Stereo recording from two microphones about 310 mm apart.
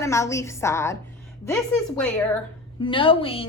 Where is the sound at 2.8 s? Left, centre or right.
Centre.